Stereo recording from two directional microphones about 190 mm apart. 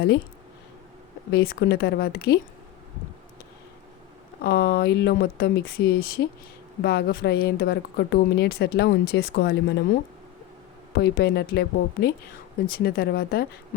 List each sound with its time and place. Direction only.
1.3 s speech: 55° left (ahead or behind)
4.4 s speech: 55° left (ahead or behind)
10.9 s speech: 60° left (ahead or behind)